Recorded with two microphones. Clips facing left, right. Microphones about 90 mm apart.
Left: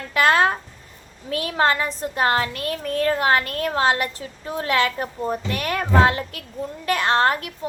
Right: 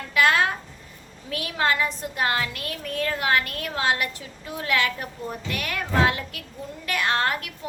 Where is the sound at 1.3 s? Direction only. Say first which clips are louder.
Left 4 dB; 35° left (ahead or behind).